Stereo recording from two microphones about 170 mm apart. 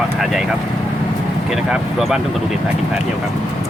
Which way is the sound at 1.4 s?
Centre (ahead or behind).